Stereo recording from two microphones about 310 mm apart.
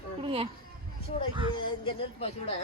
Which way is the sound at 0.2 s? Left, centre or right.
Centre.